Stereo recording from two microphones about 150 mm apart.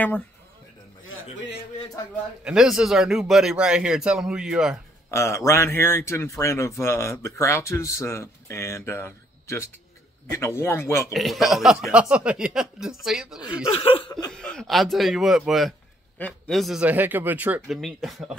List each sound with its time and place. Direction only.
2.4 s a man's voice: 5° right (ahead or behind)
5.1 s a man's voice: 20° left (ahead or behind)
11.1 s a man's voice: centre (ahead or behind)
13.7 s speech: 40° left (ahead or behind)
14.3 s a man's voice: 5° left (ahead or behind)
16.8 s speech: 10° right (ahead or behind)
17.7 s a man's voice: centre (ahead or behind)